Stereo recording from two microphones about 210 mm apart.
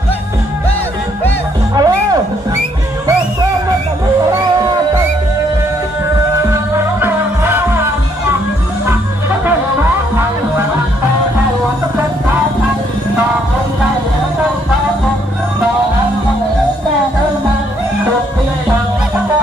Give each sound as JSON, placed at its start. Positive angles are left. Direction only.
{"t": 1.8, "sound": "music", "side_deg": -20}
{"t": 6.5, "sound": "music", "side_deg": -10}